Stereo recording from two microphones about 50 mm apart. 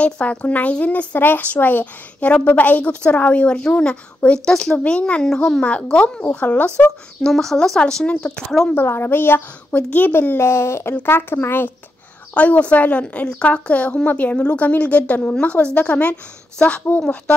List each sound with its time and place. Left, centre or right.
0.0 s a woman's voice: left
1.1 s a woman's voice: left
1.4 s a woman's voice: left
5.2 s speech: centre
5.6 s a woman's voice: left
6.4 s a woman's voice: left
7.2 s speech: centre
8.7 s a woman's voice: left
9.7 s a woman's voice: left
10.3 s a woman's voice: left
12.4 s a woman's voice: left